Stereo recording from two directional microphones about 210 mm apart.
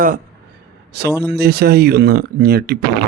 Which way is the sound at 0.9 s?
50° right (ahead or behind).